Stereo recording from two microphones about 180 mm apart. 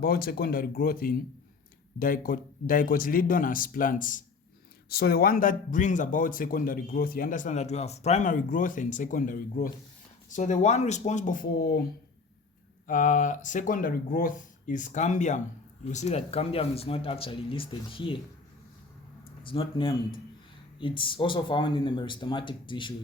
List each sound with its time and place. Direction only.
0.0 s speech: 55° left (ahead or behind)
4.9 s speech: 60° left (ahead or behind)
12.9 s speech: 45° left (ahead or behind); by 18.2 s 30° left (ahead or behind)
19.4 s speech: 30° left (ahead or behind)